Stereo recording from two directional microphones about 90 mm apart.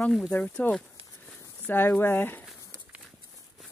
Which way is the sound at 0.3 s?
20° left (ahead or behind).